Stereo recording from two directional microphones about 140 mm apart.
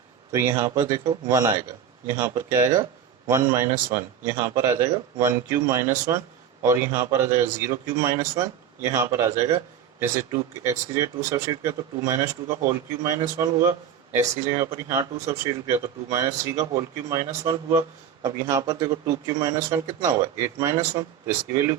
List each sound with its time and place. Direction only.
0.3 s a man's voice: 20° right (ahead or behind)